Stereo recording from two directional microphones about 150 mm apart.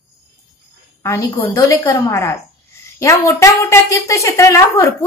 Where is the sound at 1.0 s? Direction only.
20° left (ahead or behind).